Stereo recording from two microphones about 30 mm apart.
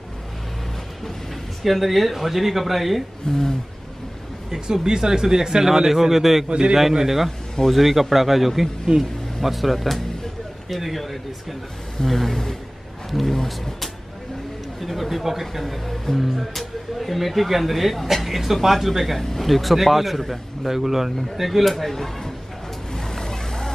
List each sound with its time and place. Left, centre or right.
1.6 s speech: centre
3.3 s speech: centre
4.8 s speech: right
7.2 s speech: centre
8.9 s speech: right
9.4 s speech: centre
14.8 s speech: centre
22.9 s vehicle: centre